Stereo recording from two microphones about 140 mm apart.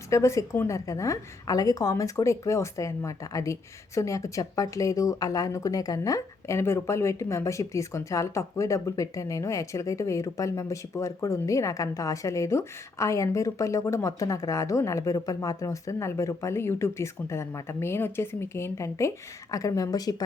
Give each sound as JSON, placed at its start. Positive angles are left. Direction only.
{"t": 0.1, "sound": "a woman's voice", "side_deg": 20}